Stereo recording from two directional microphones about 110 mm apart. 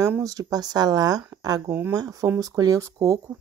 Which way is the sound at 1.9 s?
35° right (ahead or behind).